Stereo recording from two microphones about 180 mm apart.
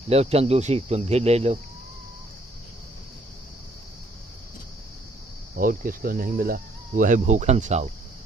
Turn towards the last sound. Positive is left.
turn(degrees=-40)  # may be behind; listen again after turning